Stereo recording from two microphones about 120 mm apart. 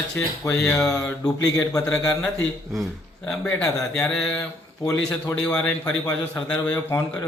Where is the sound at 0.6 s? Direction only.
5° left (ahead or behind).